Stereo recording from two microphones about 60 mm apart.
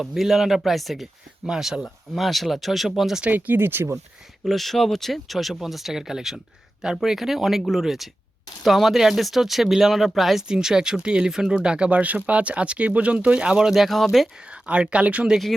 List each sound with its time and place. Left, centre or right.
0.0 s speech: centre
3.2 s speech: right
4.4 s speech: centre
14.3 s speech: centre